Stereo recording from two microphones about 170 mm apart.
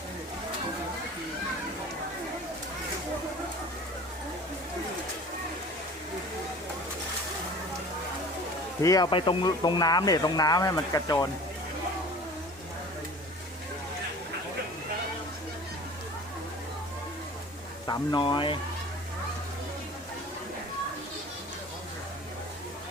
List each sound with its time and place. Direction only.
8.8 s speech: 20° left (ahead or behind)
17.8 s speech: 25° left (ahead or behind)